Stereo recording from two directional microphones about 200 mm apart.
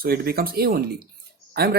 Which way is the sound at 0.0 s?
50° right (ahead or behind).